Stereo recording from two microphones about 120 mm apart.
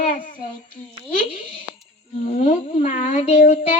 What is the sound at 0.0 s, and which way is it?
Child singing, 90° left.